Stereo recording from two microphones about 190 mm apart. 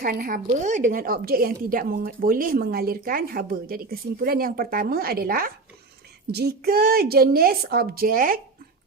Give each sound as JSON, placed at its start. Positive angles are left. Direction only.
{"t": 0.0, "sound": "a woman's voice", "side_deg": -50}